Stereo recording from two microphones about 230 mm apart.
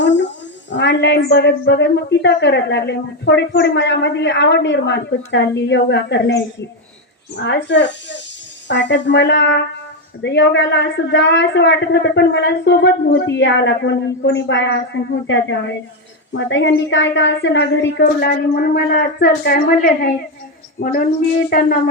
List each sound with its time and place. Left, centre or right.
0.0 s a woman's voice: left